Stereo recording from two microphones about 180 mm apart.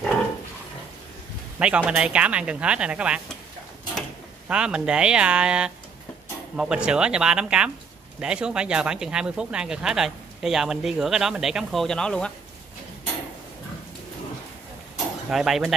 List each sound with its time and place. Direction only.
1.6 s speech: 5° right (ahead or behind)
4.5 s speech: 5° right (ahead or behind)
15.2 s speech: 5° right (ahead or behind)